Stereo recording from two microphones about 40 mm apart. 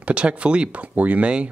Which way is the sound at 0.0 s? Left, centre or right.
Right.